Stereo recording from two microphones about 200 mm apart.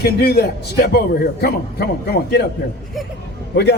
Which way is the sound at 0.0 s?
50° left (ahead or behind).